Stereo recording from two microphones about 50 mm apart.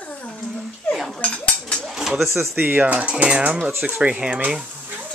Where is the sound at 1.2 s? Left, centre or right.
Centre.